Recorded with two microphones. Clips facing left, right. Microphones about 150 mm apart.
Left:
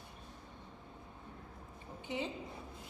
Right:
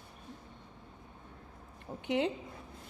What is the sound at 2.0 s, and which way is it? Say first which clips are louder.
Speech: right 8 dB; 70° right (ahead or behind).